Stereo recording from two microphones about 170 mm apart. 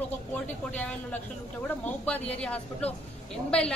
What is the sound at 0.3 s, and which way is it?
A man's voice, 10° left (ahead or behind).